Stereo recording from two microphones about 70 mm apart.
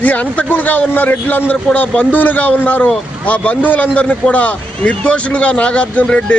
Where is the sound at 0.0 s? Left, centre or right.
Left.